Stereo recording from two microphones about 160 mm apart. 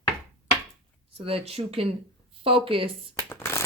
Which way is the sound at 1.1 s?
35° right (ahead or behind).